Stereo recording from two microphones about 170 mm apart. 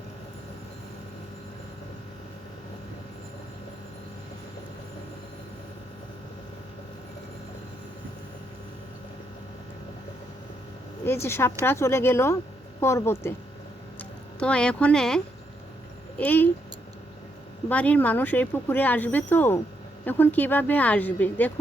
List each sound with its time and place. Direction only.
11.0 s speech: 15° left (ahead or behind)
14.3 s speech: 5° left (ahead or behind)
17.7 s speech: 10° left (ahead or behind)